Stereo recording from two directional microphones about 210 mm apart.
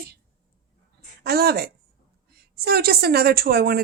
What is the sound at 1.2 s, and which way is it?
A woman's voice, 45° right (ahead or behind).